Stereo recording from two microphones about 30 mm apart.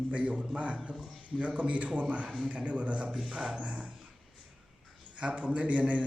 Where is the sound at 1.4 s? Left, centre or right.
Right.